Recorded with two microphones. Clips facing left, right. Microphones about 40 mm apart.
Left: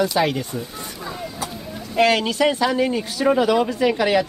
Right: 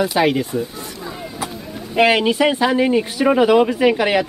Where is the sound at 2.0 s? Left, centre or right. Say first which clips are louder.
Right 3 dB; right.